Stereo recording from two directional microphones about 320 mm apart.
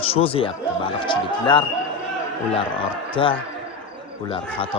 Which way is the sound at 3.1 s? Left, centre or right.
Centre.